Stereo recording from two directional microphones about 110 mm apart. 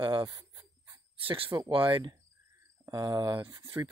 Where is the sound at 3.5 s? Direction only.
25° right (ahead or behind).